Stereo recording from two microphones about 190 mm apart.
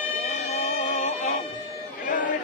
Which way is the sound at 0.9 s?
45° left (ahead or behind).